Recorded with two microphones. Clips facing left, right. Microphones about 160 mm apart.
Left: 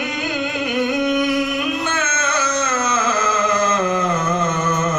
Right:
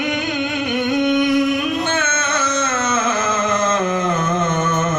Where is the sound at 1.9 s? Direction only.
25° right (ahead or behind).